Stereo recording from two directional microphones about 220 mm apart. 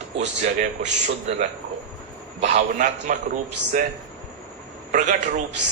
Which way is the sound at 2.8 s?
35° right (ahead or behind).